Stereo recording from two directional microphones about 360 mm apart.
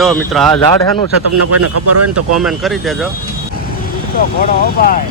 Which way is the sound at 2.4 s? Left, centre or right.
Centre.